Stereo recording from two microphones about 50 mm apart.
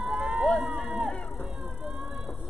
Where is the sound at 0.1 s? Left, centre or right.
Right.